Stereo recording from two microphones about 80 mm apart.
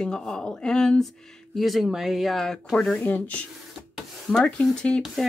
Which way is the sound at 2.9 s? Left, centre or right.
Left.